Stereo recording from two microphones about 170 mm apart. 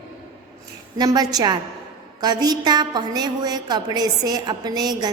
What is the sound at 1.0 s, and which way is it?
A woman's voice, 25° right (ahead or behind).